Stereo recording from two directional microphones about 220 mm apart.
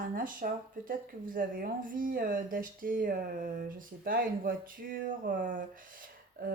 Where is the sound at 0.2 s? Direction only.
40° right (ahead or behind).